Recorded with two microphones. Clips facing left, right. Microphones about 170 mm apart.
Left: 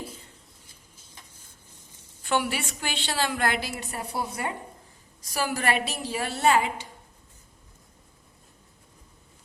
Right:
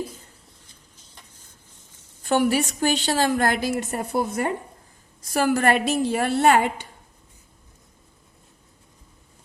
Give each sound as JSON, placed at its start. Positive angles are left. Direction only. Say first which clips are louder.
{"t": 2.2, "sound": "a woman's voice", "louder": "right 7 dB", "side_deg": -45}